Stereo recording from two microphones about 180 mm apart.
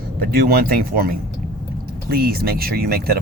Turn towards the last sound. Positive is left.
turn(degrees=-55)  # may be behind; listen again after turning